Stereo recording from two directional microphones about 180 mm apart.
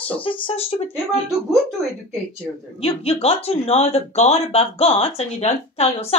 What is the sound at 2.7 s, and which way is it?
Speech, 35° left (ahead or behind).